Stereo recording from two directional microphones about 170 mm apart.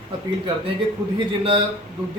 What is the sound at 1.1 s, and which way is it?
Speech, 30° right (ahead or behind).